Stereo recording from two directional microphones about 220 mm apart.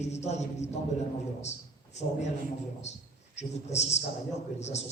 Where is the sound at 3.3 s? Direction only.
30° left (ahead or behind).